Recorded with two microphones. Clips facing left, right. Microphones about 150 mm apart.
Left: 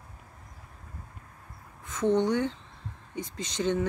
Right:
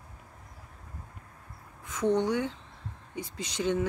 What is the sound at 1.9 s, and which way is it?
A woman's voice, 10° right (ahead or behind).